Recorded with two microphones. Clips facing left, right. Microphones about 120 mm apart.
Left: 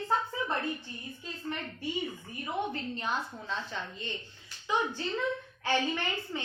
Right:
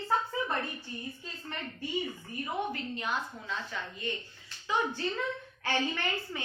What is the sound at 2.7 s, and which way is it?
Speech, 30° left (ahead or behind).